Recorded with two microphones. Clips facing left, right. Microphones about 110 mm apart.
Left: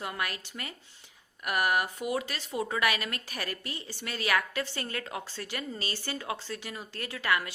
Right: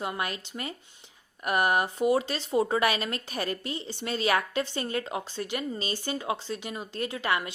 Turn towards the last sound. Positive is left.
turn(degrees=-25)  # may be behind; listen again after turning